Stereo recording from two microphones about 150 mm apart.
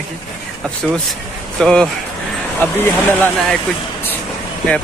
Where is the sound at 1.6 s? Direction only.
5° left (ahead or behind).